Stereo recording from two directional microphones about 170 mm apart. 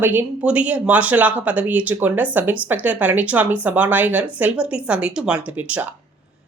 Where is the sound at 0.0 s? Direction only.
10° right (ahead or behind).